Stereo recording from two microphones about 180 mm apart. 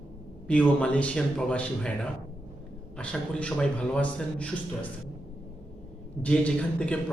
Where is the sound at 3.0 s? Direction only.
5° left (ahead or behind).